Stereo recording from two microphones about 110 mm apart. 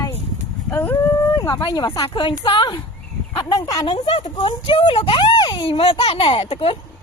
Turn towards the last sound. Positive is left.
turn(degrees=55)  # may be behind; listen again after turning